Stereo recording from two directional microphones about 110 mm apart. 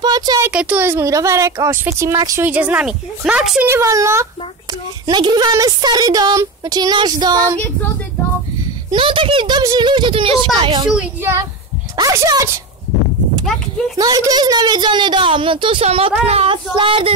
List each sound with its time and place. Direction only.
0.0 s a sound: 40° right (ahead or behind)
0.5 s a woman's voice: 10° right (ahead or behind)
3.6 s speech: 25° right (ahead or behind)
5.1 s a woman's voice: 40° right (ahead or behind)
8.9 s a woman's voice: 50° right (ahead or behind)
12.0 s a woman's voice: 35° right (ahead or behind)
13.9 s a woman's voice: 35° right (ahead or behind); by 15.8 s 50° right (ahead or behind)
15.8 s speech: 70° right (ahead or behind)
16.7 s a woman's voice: 50° right (ahead or behind)